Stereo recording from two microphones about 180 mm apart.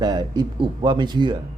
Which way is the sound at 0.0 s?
20° right (ahead or behind).